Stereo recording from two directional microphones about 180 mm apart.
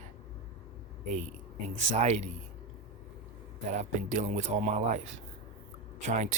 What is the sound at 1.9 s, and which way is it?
Speech, 35° right (ahead or behind).